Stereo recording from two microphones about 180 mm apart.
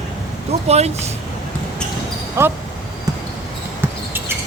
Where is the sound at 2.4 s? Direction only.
15° right (ahead or behind).